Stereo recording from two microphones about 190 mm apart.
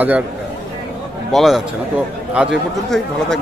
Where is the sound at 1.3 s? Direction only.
Centre (ahead or behind).